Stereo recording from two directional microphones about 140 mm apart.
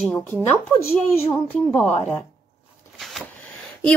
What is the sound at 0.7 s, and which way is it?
Speech, 20° left (ahead or behind).